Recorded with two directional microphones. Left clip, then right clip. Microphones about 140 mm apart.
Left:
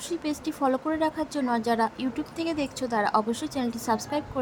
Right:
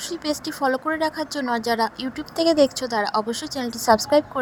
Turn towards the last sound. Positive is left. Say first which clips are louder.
# right 10 dB
turn(degrees=-50)  # may be behind; listen again after turning